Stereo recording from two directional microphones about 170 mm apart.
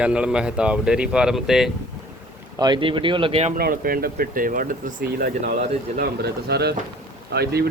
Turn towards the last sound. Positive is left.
turn(degrees=-70)  # may be behind; listen again after turning